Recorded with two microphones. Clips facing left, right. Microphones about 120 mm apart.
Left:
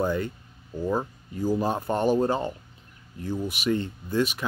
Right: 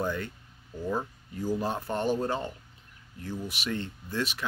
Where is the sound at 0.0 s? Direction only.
15° left (ahead or behind).